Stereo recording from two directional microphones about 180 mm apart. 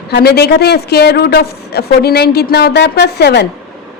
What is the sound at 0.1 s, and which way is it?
A woman's voice, 65° left (ahead or behind).